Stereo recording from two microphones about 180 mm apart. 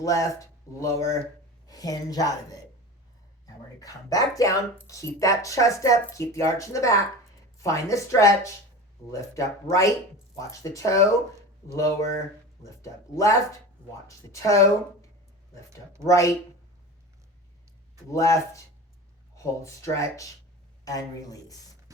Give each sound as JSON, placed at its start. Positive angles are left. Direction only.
{"t": 0.0, "sound": "speech", "side_deg": 20}
{"t": 16.0, "sound": "speech", "side_deg": 15}
{"t": 18.1, "sound": "speech", "side_deg": 15}